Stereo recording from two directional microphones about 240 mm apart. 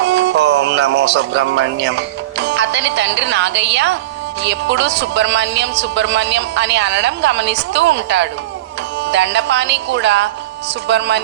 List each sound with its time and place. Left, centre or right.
0.0 s a woman's voice: right